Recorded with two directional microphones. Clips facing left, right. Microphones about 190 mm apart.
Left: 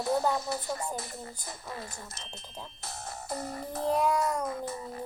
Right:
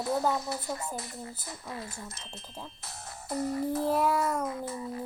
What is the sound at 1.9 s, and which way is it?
Speech, 5° right (ahead or behind).